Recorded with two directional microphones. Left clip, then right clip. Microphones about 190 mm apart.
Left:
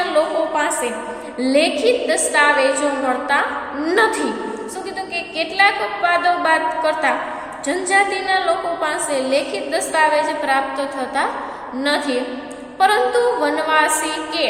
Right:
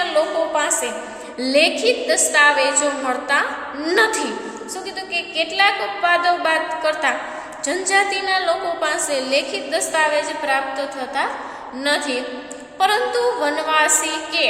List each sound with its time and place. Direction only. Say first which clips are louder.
0.5 s a woman's voice: left 1 dB; 15° right (ahead or behind)